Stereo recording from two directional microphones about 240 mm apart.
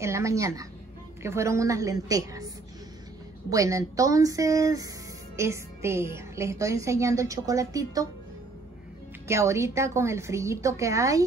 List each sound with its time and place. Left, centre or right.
0.0 s speech: centre
3.4 s speech: centre
9.3 s speech: centre